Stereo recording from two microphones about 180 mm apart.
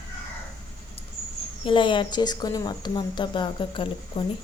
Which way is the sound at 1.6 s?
30° left (ahead or behind).